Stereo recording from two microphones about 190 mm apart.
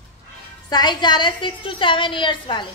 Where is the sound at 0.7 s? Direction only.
20° left (ahead or behind).